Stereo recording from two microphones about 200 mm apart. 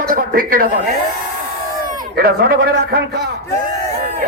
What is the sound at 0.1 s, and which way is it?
Speech, 45° right (ahead or behind).